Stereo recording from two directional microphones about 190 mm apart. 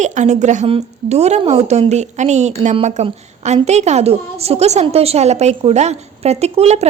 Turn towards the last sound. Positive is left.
turn(degrees=-35)  # may be behind; listen again after turning